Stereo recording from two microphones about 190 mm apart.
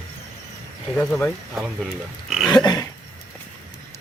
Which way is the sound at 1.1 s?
Centre (ahead or behind).